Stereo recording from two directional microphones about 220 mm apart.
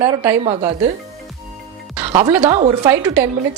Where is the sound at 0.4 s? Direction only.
25° right (ahead or behind).